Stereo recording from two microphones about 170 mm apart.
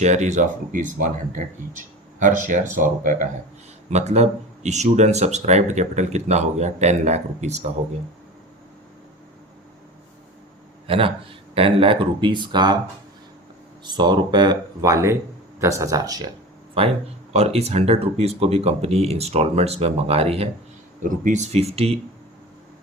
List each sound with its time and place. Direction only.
0.0 s speech: 45° right (ahead or behind)
2.1 s speech: 50° right (ahead or behind)
10.8 s speech: 30° right (ahead or behind)
13.8 s speech: 25° right (ahead or behind)
16.8 s speech: 35° right (ahead or behind)
21.0 s speech: 45° right (ahead or behind)